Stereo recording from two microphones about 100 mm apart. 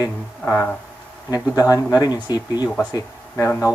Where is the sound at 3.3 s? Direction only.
20° left (ahead or behind).